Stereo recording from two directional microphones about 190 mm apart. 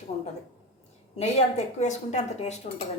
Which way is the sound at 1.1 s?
35° left (ahead or behind).